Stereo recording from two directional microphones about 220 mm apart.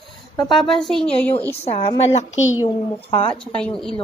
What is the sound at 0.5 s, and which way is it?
Speech, centre (ahead or behind).